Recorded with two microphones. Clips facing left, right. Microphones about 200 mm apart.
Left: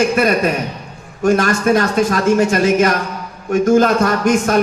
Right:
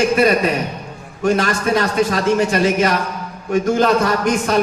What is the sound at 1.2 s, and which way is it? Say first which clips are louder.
Speech: left 3 dB; 45° left (ahead or behind).